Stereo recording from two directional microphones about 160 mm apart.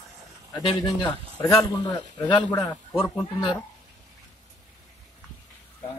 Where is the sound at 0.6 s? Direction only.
30° left (ahead or behind).